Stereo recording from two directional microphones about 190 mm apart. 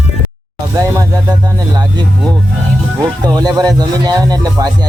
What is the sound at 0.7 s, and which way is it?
Music, 15° right (ahead or behind).